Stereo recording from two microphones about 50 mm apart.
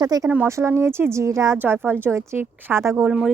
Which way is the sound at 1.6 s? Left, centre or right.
Right.